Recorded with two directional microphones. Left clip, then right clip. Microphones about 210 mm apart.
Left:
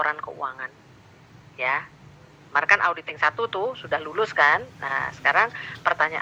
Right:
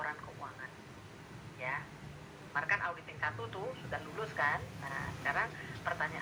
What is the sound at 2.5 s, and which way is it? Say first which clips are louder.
Speech: left 15 dB; 40° left (ahead or behind).